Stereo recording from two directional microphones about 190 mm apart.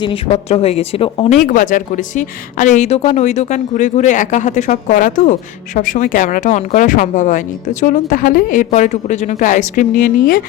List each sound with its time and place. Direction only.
0.0 s speech: 30° left (ahead or behind)
1.4 s a woman's voice: 45° left (ahead or behind)